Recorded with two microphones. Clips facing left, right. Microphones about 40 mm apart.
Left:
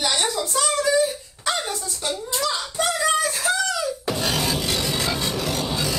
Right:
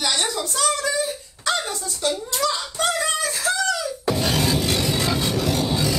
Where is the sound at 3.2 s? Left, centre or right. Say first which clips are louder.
Left 1 dB; centre.